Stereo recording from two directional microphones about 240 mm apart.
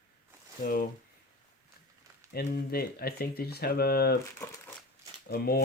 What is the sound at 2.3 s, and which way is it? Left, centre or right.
Speech, left.